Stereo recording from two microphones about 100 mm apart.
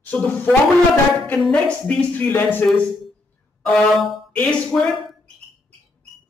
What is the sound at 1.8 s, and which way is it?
Speech, 15° left (ahead or behind).